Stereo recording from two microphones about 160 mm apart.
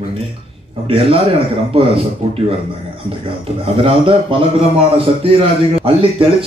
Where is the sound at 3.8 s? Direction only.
35° right (ahead or behind).